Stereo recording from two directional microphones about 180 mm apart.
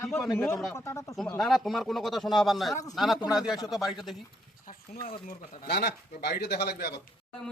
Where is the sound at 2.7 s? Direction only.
20° left (ahead or behind).